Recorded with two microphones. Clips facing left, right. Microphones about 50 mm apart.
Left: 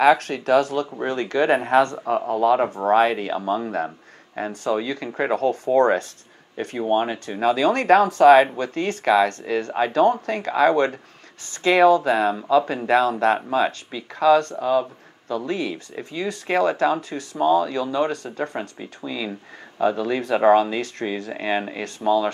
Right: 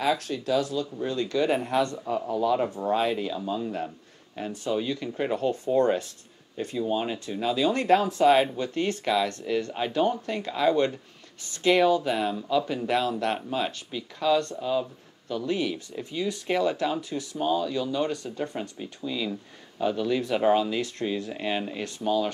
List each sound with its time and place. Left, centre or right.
0.0 s speech: left
6.9 s speech: left
8.5 s speech: left